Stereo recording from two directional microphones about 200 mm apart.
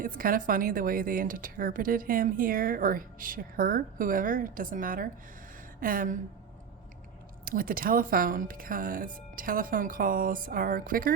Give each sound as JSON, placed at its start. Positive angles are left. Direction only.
{"t": 0.0, "sound": "speech", "side_deg": -45}
{"t": 7.4, "sound": "speech", "side_deg": -45}